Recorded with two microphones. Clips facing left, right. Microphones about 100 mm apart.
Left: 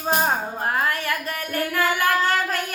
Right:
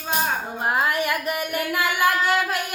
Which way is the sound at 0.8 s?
15° right (ahead or behind).